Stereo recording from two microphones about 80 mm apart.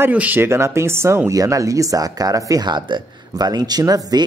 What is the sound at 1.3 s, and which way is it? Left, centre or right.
Speech, right.